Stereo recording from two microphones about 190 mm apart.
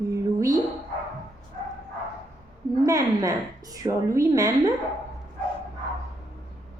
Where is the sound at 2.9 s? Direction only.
20° right (ahead or behind).